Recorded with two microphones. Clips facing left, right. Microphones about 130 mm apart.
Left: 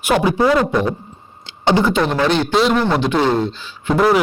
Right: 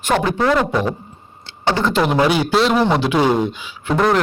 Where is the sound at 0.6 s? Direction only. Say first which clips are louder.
Left 1 dB; 5° right (ahead or behind).